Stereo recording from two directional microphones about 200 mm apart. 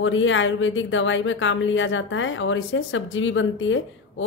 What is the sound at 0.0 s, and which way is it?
Speech, 75° left (ahead or behind).